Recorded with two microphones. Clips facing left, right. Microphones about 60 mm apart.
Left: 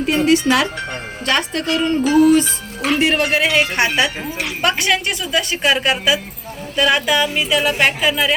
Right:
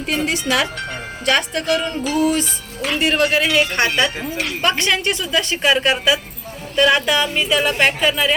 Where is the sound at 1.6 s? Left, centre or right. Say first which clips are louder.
Left 3 dB; left.